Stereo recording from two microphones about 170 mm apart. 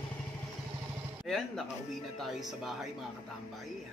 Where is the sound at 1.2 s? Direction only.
Centre (ahead or behind).